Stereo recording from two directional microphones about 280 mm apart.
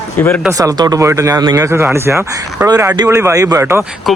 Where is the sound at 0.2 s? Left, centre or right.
Centre.